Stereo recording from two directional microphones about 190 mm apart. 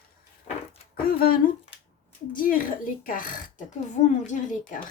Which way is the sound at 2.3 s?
45° left (ahead or behind).